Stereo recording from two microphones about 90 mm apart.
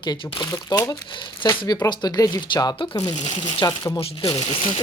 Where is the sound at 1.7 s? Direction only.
50° left (ahead or behind).